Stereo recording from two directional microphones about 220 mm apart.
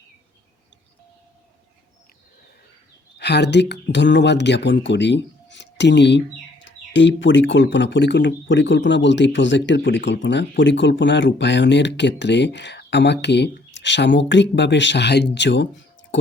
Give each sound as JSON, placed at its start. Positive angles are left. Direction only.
{"t": 3.2, "sound": "speech", "side_deg": 50}